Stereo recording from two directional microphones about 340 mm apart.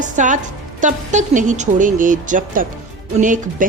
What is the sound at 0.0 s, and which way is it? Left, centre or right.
A woman's voice, right.